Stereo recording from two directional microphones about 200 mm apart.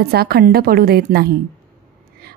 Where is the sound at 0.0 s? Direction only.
50° right (ahead or behind).